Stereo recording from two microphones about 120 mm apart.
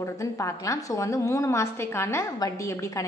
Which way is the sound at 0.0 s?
25° left (ahead or behind).